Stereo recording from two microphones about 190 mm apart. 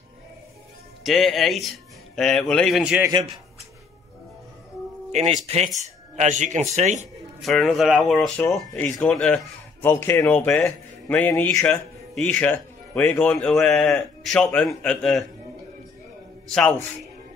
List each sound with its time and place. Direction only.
1.0 s speech: centre (ahead or behind)
5.1 s speech: 35° right (ahead or behind)
7.4 s a man's voice: centre (ahead or behind)
16.4 s a man's voice: 5° left (ahead or behind)